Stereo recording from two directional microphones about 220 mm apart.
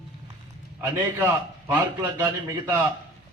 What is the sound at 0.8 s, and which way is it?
A man's voice, 10° right (ahead or behind).